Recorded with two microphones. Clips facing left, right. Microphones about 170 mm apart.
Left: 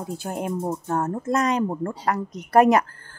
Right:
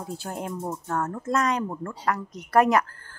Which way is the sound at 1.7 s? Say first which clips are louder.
Left 3 dB; 30° left (ahead or behind).